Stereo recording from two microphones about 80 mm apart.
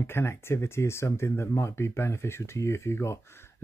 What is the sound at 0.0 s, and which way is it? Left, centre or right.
Speech, left.